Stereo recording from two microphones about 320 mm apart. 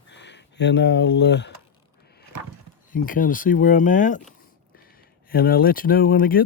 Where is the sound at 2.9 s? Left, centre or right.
Left.